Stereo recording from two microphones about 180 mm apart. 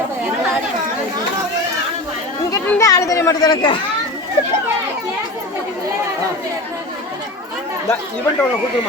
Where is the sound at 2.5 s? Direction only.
15° left (ahead or behind).